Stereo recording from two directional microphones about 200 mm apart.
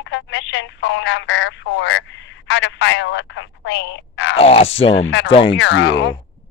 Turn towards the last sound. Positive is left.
turn(degrees=65)  # may be behind; listen again after turning